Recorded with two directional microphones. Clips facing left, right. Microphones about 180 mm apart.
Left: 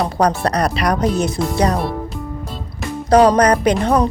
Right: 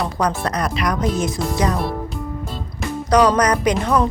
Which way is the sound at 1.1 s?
65° left (ahead or behind).